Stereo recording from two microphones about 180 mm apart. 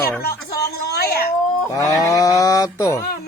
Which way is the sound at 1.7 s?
20° left (ahead or behind).